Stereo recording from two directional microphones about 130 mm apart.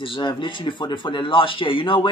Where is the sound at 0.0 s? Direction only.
40° left (ahead or behind).